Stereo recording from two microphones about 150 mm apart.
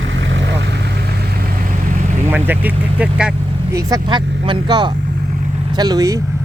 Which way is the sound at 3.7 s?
25° right (ahead or behind).